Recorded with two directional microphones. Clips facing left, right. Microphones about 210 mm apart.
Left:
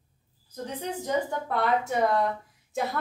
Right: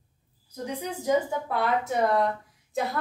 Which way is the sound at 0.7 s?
10° right (ahead or behind).